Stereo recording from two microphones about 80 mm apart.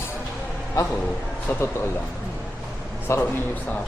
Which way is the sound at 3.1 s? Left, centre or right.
Left.